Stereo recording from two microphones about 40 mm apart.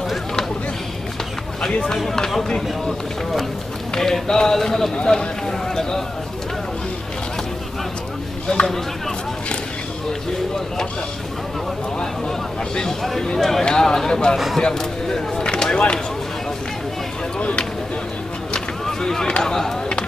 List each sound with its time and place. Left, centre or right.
2.0 s speech: centre
8.5 s speech: left
12.3 s speech: centre
17.4 s a sound: left
18.9 s a sound: centre
19.4 s chop: centre